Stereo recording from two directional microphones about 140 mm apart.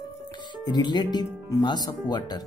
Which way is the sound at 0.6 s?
30° left (ahead or behind).